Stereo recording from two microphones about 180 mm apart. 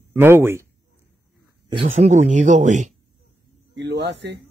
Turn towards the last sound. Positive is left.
turn(degrees=-70)  # may be behind; listen again after turning